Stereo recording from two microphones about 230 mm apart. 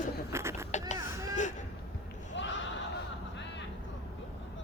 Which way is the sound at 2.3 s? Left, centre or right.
Left.